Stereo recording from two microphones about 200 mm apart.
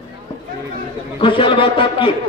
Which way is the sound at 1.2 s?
25° left (ahead or behind).